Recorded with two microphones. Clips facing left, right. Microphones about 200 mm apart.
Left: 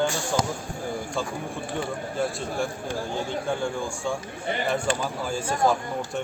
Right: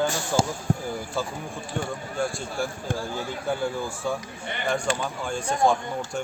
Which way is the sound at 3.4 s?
5° right (ahead or behind).